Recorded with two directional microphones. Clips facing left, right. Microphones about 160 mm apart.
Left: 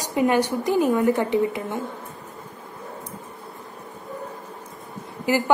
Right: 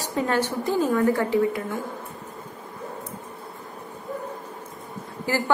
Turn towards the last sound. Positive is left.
turn(degrees=15)  # may be behind; listen again after turning